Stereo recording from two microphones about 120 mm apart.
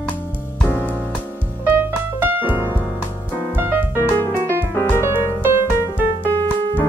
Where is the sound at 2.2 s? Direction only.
15° right (ahead or behind).